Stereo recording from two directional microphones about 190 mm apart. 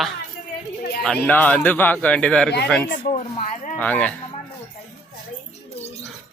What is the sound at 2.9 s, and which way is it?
Speech, 45° left (ahead or behind).